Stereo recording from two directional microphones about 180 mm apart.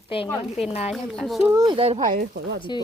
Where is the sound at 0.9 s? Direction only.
Centre (ahead or behind).